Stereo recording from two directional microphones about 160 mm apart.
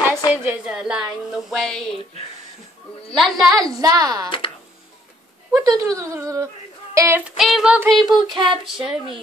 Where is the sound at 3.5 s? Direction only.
25° right (ahead or behind).